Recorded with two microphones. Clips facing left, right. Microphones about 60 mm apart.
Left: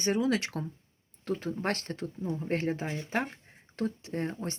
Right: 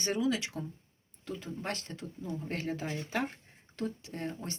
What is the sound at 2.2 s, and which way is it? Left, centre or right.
Speech, left.